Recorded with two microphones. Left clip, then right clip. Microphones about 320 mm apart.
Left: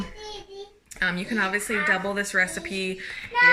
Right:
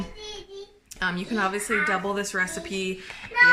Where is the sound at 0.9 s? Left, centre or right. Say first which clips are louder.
Left 2 dB; centre.